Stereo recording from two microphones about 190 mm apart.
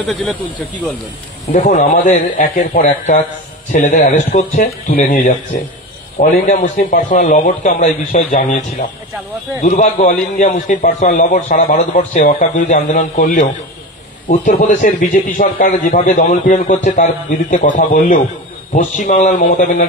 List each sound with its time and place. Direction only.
0.1 s speech: centre (ahead or behind)
1.5 s a man's voice: 40° left (ahead or behind)
6.4 s a man's voice: 40° left (ahead or behind)
9.6 s a man's voice: 40° left (ahead or behind)